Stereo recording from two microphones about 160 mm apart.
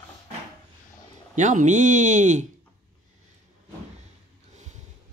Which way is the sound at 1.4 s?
50° right (ahead or behind).